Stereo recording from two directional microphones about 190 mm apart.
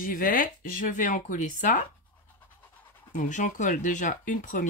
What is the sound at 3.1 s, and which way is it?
Speech, 45° left (ahead or behind).